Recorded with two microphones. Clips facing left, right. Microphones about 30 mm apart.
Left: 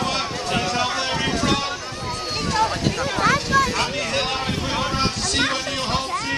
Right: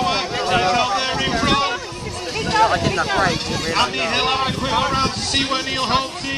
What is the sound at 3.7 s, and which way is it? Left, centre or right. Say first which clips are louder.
A man's voice: right 4 dB; right.